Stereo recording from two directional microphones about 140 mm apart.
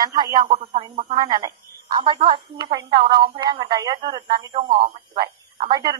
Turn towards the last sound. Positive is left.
turn(degrees=-30)  # may be behind; listen again after turning